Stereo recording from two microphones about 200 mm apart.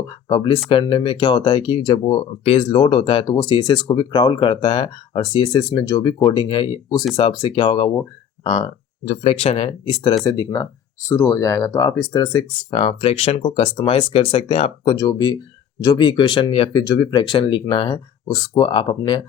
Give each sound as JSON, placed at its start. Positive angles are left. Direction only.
{"t": 0.3, "sound": "speech", "side_deg": 25}
{"t": 14.9, "sound": "speech", "side_deg": 20}